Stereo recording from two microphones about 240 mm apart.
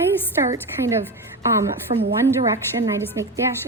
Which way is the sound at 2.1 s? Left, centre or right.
Centre.